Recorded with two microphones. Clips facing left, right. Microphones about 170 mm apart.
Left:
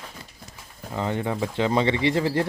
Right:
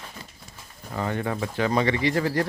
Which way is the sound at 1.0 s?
20° left (ahead or behind).